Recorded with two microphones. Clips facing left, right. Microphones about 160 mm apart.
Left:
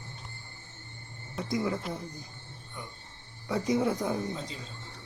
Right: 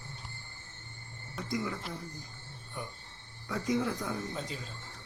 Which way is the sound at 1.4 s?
20° left (ahead or behind).